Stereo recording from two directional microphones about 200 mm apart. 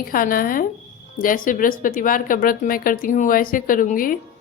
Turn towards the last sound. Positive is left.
turn(degrees=45)  # may be behind; listen again after turning